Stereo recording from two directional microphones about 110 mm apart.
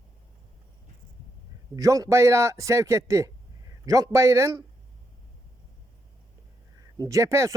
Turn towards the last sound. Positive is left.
turn(degrees=-30)  # may be behind; listen again after turning